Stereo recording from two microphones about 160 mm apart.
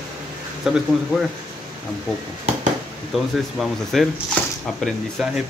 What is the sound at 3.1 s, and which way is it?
Speech, centre (ahead or behind).